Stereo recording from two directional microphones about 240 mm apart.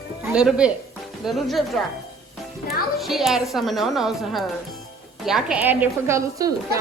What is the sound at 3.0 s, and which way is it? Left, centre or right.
A woman's voice, centre.